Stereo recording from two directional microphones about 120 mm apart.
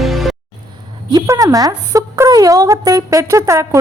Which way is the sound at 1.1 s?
25° right (ahead or behind).